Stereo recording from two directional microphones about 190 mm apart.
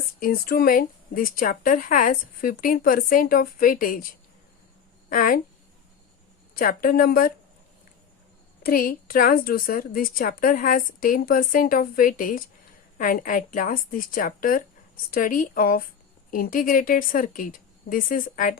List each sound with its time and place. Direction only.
0.2 s speech: 50° left (ahead or behind)
5.0 s speech: 45° left (ahead or behind)
6.5 s speech: 50° left (ahead or behind)
8.6 s speech: 50° left (ahead or behind)